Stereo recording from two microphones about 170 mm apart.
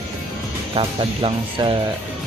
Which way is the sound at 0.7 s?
30° right (ahead or behind).